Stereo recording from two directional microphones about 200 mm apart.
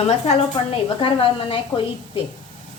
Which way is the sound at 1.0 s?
25° left (ahead or behind).